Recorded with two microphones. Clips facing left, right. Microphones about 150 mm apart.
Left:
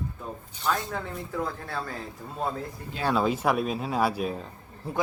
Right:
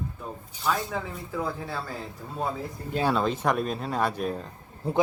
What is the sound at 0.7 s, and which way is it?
Speech, 5° right (ahead or behind).